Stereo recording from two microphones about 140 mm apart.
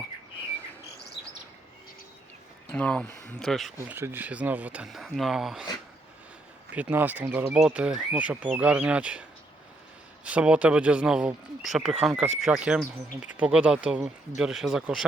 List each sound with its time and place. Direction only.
2.7 s speech: 10° left (ahead or behind)
3.8 s speech: 15° right (ahead or behind)
6.7 s speech: 10° right (ahead or behind)
10.2 s speech: 10° right (ahead or behind)